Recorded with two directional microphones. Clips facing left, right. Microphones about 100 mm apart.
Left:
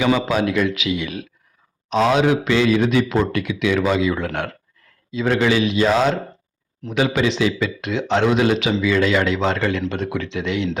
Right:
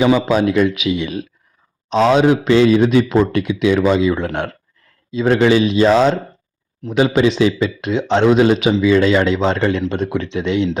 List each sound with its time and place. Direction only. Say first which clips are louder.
0.0 s a man's voice: right 4 dB; 25° right (ahead or behind)